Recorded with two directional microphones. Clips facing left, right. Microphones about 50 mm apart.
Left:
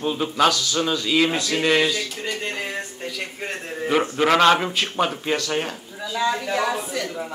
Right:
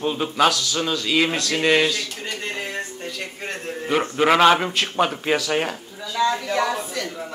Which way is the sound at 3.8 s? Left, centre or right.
Centre.